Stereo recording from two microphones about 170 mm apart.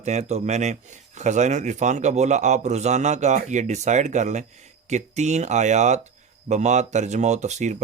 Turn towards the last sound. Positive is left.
turn(degrees=-45)  # may be behind; listen again after turning